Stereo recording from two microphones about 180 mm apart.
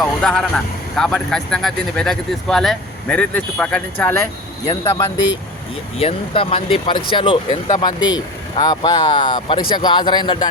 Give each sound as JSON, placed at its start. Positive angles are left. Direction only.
{"t": 0.2, "sound": "speech", "side_deg": 5}
{"t": 6.0, "sound": "speech", "side_deg": 30}